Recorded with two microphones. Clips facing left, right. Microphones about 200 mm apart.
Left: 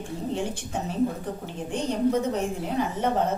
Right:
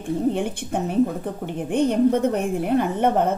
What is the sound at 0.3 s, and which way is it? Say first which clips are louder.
A woman's voice: right 5 dB; 60° right (ahead or behind).